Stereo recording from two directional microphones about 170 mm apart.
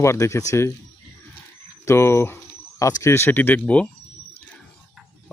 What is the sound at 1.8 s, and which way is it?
Speech, 15° left (ahead or behind).